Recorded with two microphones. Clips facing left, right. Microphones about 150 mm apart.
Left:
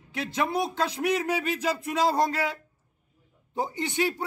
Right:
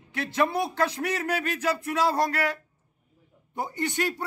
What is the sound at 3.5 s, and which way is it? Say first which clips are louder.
Speech: left 1 dB; 20° left (ahead or behind).